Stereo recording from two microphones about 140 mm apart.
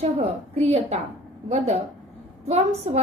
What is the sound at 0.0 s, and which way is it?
A woman's voice, 50° right (ahead or behind).